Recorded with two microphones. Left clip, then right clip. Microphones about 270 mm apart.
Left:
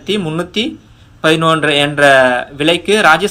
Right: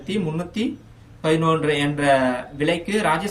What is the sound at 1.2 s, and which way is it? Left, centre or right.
Speech, centre.